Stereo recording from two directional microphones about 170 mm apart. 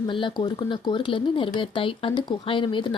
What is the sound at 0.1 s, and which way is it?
Speech, 30° left (ahead or behind).